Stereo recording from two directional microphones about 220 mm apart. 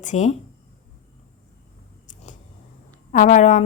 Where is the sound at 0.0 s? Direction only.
35° left (ahead or behind).